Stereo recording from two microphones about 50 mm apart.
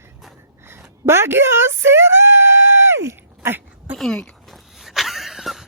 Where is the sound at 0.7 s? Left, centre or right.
Right.